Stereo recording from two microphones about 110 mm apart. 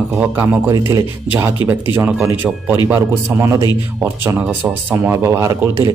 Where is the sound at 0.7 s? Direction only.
30° right (ahead or behind).